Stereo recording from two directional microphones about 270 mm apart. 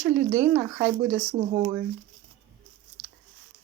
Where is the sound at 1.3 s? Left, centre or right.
Right.